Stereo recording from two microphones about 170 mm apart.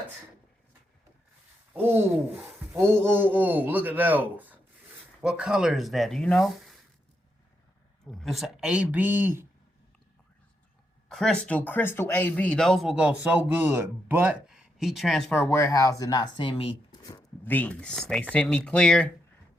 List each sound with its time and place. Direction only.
1.7 s a man's voice: 10° right (ahead or behind); by 6.7 s 5° left (ahead or behind)
8.0 s speech: centre (ahead or behind)
11.1 s speech: 5° left (ahead or behind); by 16.7 s 30° left (ahead or behind)
17.0 s a sound: 25° left (ahead or behind)
17.4 s speech: 10° left (ahead or behind)